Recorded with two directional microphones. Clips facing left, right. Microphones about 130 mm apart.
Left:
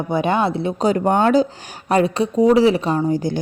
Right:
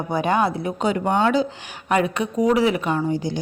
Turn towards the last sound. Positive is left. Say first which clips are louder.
# left 3 dB
turn(degrees=45)  # may be behind; listen again after turning